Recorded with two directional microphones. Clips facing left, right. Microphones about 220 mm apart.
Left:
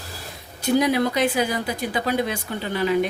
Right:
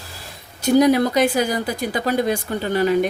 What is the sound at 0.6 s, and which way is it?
Speech, 40° right (ahead or behind).